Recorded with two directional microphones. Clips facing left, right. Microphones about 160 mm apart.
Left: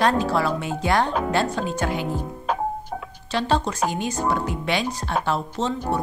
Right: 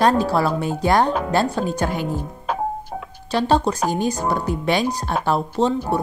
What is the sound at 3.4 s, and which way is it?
A woman's voice, 35° right (ahead or behind).